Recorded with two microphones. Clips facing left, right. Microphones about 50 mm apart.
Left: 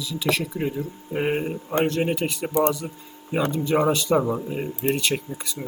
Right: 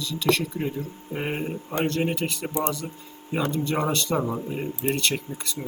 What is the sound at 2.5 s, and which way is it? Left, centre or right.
Speech, left.